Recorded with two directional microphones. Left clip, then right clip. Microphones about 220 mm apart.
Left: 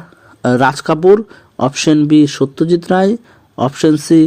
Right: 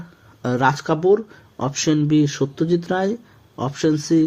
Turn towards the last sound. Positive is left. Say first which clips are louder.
# left 8 dB
turn(degrees=30)  # may be behind; listen again after turning